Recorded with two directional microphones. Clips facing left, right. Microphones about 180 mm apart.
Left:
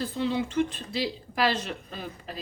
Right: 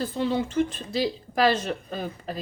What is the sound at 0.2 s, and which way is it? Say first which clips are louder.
Speech: right 2 dB; 45° right (ahead or behind).